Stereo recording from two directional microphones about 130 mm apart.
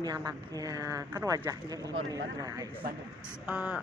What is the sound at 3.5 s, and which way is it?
Speech, 10° right (ahead or behind).